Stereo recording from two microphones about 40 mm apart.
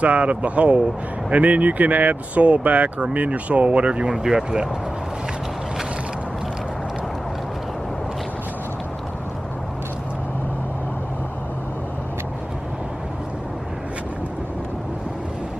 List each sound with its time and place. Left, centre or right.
0.0 s speech: right
4.1 s speech: centre